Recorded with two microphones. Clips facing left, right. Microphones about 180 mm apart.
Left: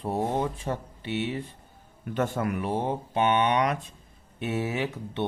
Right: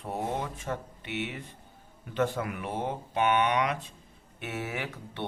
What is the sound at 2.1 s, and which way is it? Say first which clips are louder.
Speech: left 2 dB; 45° left (ahead or behind).